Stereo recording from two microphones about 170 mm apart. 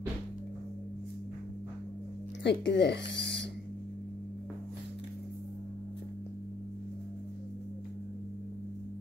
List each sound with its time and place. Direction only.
2.4 s speech: 90° left